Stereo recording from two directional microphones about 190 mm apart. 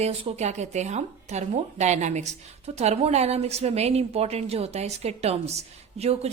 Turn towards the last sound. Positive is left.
turn(degrees=-35)  # may be behind; listen again after turning